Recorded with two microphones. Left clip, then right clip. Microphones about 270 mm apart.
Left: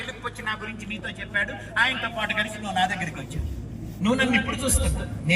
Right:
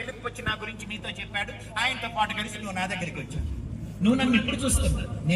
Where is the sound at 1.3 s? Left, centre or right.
Right.